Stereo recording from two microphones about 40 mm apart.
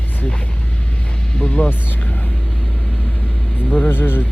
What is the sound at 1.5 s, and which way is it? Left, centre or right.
Speech, left.